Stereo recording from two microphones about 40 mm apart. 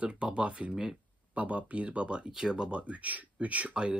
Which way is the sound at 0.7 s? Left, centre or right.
Centre.